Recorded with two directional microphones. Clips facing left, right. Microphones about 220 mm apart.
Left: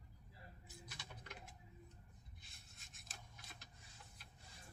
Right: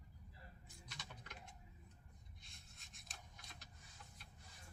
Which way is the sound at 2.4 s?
Centre (ahead or behind).